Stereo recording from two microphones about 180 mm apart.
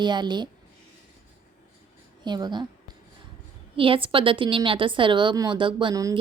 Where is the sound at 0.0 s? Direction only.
25° right (ahead or behind).